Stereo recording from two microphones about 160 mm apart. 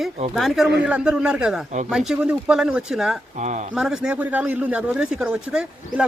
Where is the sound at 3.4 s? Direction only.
45° right (ahead or behind).